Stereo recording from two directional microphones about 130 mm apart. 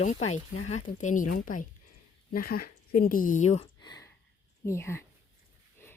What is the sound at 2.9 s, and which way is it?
Speech, 90° left.